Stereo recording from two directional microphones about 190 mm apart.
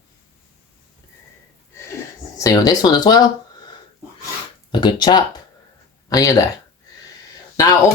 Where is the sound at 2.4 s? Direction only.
20° left (ahead or behind).